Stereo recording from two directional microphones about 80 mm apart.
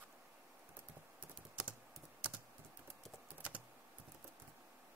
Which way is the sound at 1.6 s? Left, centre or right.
Centre.